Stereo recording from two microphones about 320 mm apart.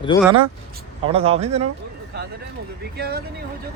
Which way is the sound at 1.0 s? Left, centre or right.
Centre.